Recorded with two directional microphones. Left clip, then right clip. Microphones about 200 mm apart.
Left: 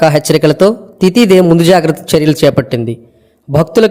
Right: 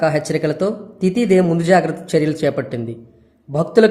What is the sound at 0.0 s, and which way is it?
A man's voice, 45° left (ahead or behind).